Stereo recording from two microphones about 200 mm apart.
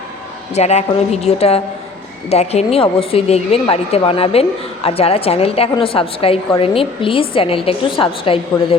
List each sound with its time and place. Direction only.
0.5 s a woman's voice: 35° left (ahead or behind)